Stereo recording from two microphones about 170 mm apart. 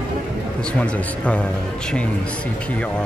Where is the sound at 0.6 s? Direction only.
5° left (ahead or behind).